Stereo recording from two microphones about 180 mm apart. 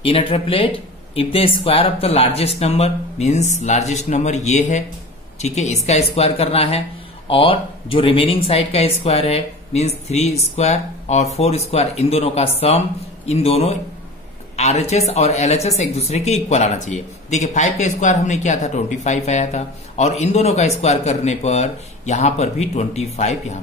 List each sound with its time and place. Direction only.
0.0 s speech: 30° left (ahead or behind)